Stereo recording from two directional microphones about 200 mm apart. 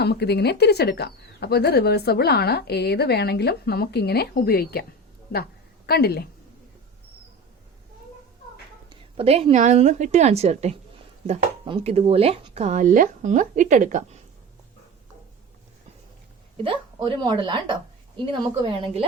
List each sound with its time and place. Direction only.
0.0 s speech: 55° left (ahead or behind)
5.3 s a sound: 50° left (ahead or behind)
8.9 s speech: 30° right (ahead or behind)
16.6 s a woman's voice: 25° right (ahead or behind)